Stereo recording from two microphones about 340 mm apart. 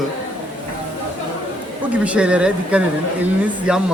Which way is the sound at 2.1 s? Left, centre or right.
Centre.